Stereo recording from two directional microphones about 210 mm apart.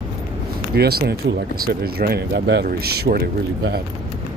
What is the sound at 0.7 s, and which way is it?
Speech, 50° right (ahead or behind).